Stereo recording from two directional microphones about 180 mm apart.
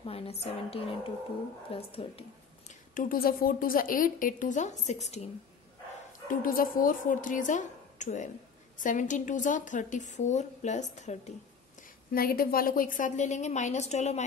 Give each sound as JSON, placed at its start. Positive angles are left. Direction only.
{"t": 0.0, "sound": "a woman's voice", "side_deg": 35}
{"t": 2.7, "sound": "a woman's voice", "side_deg": 50}
{"t": 6.4, "sound": "a woman's voice", "side_deg": 50}
{"t": 12.1, "sound": "a woman's voice", "side_deg": 55}